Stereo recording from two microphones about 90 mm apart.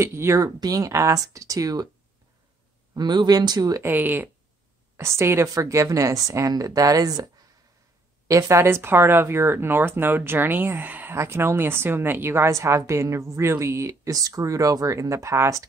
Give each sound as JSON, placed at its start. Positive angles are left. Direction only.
{"t": 0.0, "sound": "speech", "side_deg": -30}
{"t": 0.6, "sound": "a woman's voice", "side_deg": -40}
{"t": 2.9, "sound": "speech", "side_deg": -50}
{"t": 3.8, "sound": "a woman's voice", "side_deg": -20}
{"t": 8.3, "sound": "speech", "side_deg": -35}
{"t": 11.1, "sound": "a woman's voice", "side_deg": -30}